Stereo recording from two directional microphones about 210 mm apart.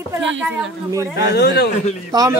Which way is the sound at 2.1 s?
20° right (ahead or behind).